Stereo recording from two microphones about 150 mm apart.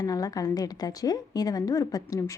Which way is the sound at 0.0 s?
25° left (ahead or behind).